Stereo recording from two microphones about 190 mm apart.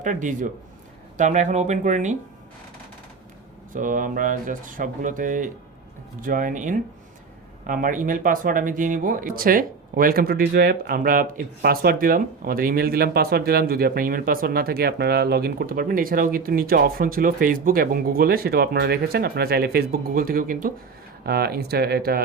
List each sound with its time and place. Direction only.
0.0 s speech: 40° right (ahead or behind)
3.7 s speech: 45° right (ahead or behind)